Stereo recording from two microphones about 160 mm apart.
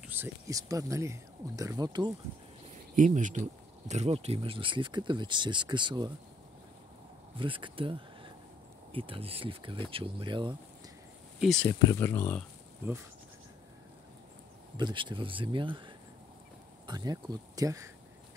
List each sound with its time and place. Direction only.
0.0 s speech: 10° right (ahead or behind)
3.0 s speech: 55° right (ahead or behind); by 6.1 s 30° right (ahead or behind)
7.3 s speech: 30° right (ahead or behind)
11.3 s speech: centre (ahead or behind)
11.8 s speech: 15° left (ahead or behind)
14.8 s speech: 30° right (ahead or behind)